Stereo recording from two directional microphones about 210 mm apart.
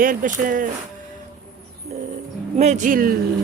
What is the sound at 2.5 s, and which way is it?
Speech, 35° right (ahead or behind).